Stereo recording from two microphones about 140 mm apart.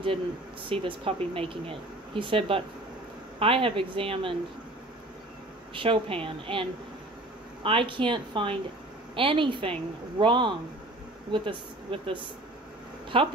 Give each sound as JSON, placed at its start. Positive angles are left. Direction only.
{"t": 0.7, "sound": "speech", "side_deg": -40}
{"t": 5.8, "sound": "speech", "side_deg": -40}
{"t": 7.6, "sound": "speech", "side_deg": -40}